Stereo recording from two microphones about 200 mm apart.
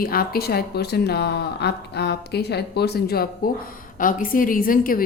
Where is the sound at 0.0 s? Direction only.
50° left (ahead or behind).